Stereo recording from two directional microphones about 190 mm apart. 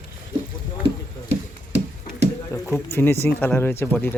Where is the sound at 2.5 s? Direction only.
10° left (ahead or behind).